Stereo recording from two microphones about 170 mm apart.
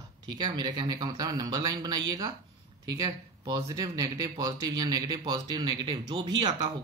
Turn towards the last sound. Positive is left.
turn(degrees=-25)  # may be behind; listen again after turning